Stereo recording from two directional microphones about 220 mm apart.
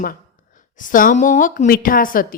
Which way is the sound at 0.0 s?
40° left (ahead or behind).